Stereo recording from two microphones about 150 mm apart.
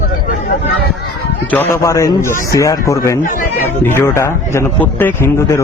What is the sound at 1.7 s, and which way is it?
A man's voice, 20° left (ahead or behind).